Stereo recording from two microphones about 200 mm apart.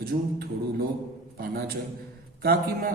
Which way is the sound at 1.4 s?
50° right (ahead or behind).